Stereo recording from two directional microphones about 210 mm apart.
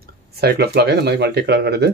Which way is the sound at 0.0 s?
50° right (ahead or behind).